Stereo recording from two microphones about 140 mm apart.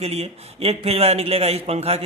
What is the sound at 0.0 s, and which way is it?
Speech, 50° right (ahead or behind).